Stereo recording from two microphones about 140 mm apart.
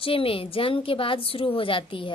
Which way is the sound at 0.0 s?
40° left (ahead or behind).